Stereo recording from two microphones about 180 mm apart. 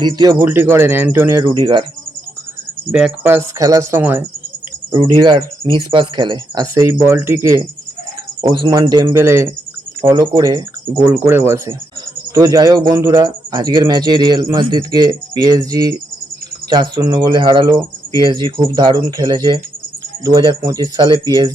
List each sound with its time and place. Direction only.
0.0 s speech: 20° right (ahead or behind)
2.9 s speech: 10° right (ahead or behind)
4.9 s speech: 25° right (ahead or behind)